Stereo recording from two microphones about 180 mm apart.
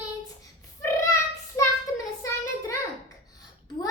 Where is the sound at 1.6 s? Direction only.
15° left (ahead or behind).